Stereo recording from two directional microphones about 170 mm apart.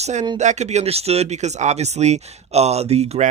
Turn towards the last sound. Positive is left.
turn(degrees=-40)  # may be behind; listen again after turning